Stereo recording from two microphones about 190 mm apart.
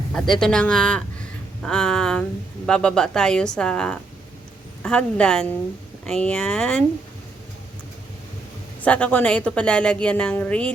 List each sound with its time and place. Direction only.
0.1 s a woman's voice: centre (ahead or behind)
8.8 s a woman's voice: 5° left (ahead or behind)